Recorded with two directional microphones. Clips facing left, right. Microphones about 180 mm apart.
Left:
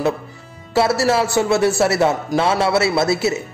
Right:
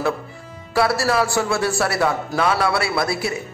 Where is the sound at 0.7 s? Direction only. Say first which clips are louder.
Left 2 dB; 25° left (ahead or behind).